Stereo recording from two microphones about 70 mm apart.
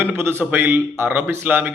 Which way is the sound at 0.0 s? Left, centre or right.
Right.